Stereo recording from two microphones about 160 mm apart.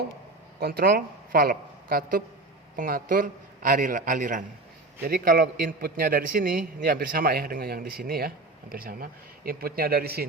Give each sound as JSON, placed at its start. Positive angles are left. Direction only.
{"t": 0.6, "sound": "a woman's voice", "side_deg": -75}
{"t": 5.0, "sound": "a man's voice", "side_deg": -65}